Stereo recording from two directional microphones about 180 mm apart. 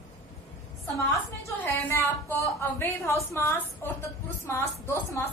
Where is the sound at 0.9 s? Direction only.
15° left (ahead or behind).